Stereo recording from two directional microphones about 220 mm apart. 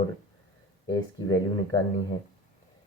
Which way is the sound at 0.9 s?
15° left (ahead or behind).